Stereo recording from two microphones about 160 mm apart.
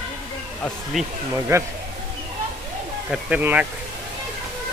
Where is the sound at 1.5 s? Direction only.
20° right (ahead or behind).